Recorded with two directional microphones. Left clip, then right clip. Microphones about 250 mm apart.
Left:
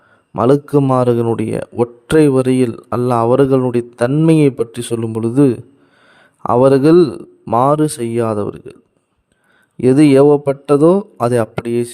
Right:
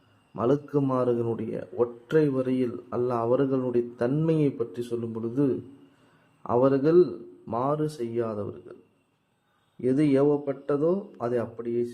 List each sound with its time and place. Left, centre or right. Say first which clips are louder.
0.3 s a man's voice: left 13 dB; left
9.8 s a man's voice: left 14 dB; left